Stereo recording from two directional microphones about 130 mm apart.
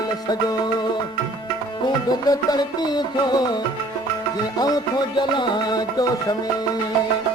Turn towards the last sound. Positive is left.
turn(degrees=35)  # may be behind; listen again after turning